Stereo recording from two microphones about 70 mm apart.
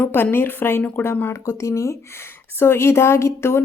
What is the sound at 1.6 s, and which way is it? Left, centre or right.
A woman's voice, left.